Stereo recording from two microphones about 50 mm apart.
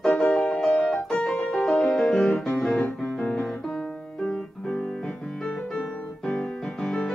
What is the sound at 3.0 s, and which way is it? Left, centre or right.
Piano, centre.